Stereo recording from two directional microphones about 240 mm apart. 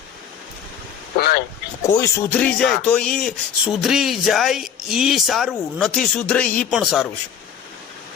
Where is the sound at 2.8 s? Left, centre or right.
Centre.